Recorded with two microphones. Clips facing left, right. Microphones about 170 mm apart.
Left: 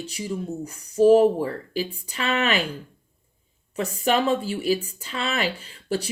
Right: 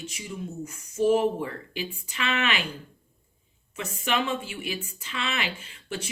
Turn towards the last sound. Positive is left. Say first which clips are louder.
# left 8 dB
turn(degrees=35)  # may be behind; listen again after turning